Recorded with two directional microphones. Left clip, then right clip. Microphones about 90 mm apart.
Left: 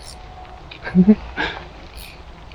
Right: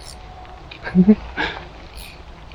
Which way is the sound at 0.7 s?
15° right (ahead or behind).